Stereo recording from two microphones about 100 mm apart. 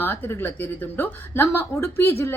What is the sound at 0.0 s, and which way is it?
Speech, 20° left (ahead or behind).